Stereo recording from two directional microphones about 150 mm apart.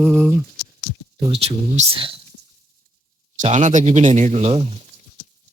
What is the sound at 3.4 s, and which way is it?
Speech, 50° right (ahead or behind).